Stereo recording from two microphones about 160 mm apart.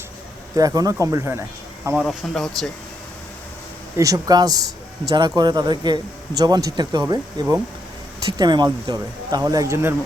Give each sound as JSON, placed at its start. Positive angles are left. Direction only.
{"t": 0.5, "sound": "speech", "side_deg": -20}
{"t": 2.0, "sound": "speech", "side_deg": 0}
{"t": 3.9, "sound": "speech", "side_deg": -20}